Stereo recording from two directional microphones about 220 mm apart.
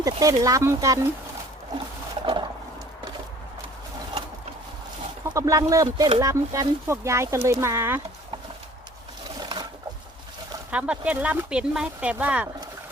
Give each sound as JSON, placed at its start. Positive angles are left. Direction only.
{"t": 0.0, "sound": "speech", "side_deg": -15}
{"t": 2.2, "sound": "roaring cats", "side_deg": -20}
{"t": 5.2, "sound": "speech", "side_deg": -15}
{"t": 9.4, "sound": "a sound", "side_deg": -20}
{"t": 10.7, "sound": "speech", "side_deg": -5}